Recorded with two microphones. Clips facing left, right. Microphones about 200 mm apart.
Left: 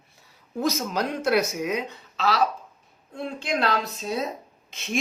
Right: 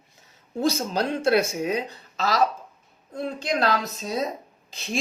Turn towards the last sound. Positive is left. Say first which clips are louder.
# even
turn(degrees=-35)  # may be behind; listen again after turning